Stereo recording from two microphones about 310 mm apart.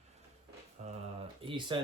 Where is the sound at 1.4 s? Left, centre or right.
Centre.